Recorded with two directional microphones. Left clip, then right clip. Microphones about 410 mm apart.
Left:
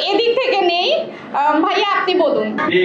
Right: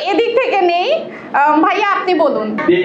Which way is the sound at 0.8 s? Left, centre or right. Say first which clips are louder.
Right 1 dB; right.